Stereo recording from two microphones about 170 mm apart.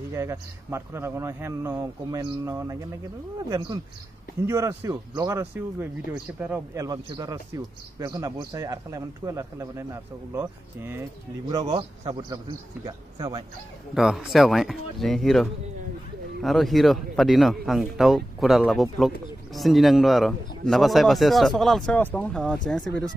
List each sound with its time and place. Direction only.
0.1 s a man's voice: 15° right (ahead or behind)
6.8 s a man's voice: 25° right (ahead or behind)
11.4 s speech: 25° right (ahead or behind)
12.8 s speech: 20° right (ahead or behind)
13.9 s speech: centre (ahead or behind)